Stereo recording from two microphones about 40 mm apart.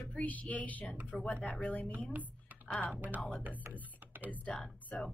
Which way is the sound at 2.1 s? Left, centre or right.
Right.